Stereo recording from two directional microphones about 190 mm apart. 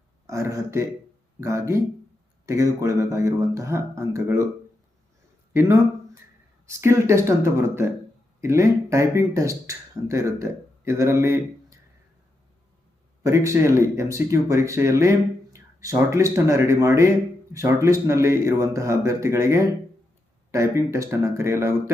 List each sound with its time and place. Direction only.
0.3 s speech: 15° right (ahead or behind)
6.7 s speech: 15° right (ahead or behind)
13.2 s speech: 15° right (ahead or behind)